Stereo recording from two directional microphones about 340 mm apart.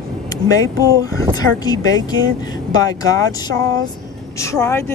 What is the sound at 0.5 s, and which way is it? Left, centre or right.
Speech, centre.